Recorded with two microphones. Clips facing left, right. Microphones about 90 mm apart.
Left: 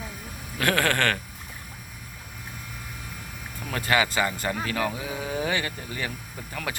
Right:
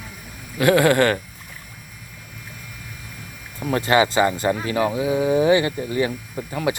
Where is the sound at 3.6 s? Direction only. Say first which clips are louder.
Right 7 dB; 30° right (ahead or behind).